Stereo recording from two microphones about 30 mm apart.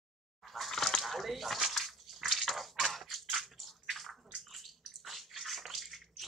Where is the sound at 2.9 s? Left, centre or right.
Centre.